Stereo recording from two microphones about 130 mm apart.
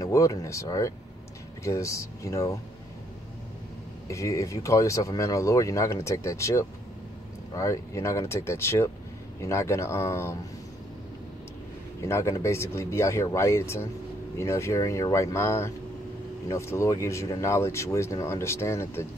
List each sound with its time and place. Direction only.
0.0 s speech: 25° left (ahead or behind)
4.1 s speech: 25° left (ahead or behind)
12.0 s speech: 20° left (ahead or behind)